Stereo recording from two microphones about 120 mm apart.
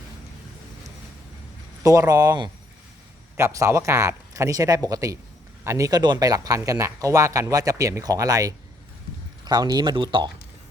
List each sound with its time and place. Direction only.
1.8 s speech: 30° right (ahead or behind)